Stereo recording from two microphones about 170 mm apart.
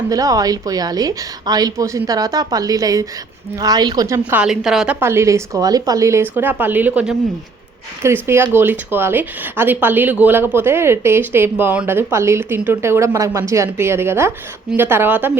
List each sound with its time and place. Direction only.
0.1 s a woman's voice: 20° right (ahead or behind)
4.2 s a woman's voice: 10° right (ahead or behind)
4.9 s speech: 15° right (ahead or behind)